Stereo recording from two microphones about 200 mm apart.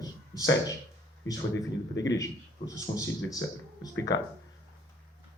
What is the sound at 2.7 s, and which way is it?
A man's voice, 15° left (ahead or behind).